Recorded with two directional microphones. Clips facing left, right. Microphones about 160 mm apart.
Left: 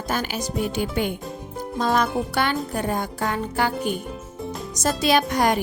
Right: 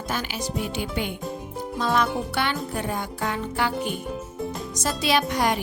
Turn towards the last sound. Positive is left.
turn(degrees=45)  # may be behind; listen again after turning